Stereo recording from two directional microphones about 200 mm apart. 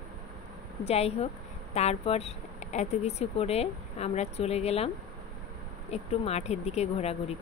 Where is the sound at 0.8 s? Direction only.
30° left (ahead or behind).